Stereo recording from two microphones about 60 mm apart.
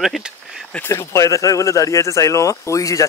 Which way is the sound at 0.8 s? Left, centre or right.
Left.